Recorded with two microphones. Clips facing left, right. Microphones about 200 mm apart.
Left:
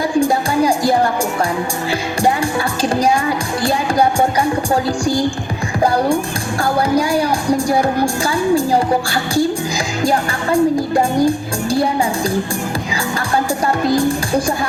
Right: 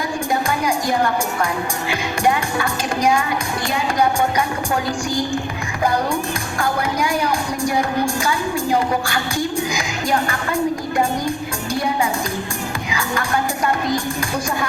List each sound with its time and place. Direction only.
0.2 s music: 30° left (ahead or behind)
6.6 s music: 30° left (ahead or behind)